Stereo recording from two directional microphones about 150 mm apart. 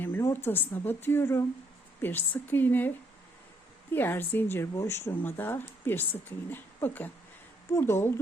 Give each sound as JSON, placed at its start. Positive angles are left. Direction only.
{"t": 0.0, "sound": "a woman's voice", "side_deg": 15}
{"t": 3.9, "sound": "a woman's voice", "side_deg": 15}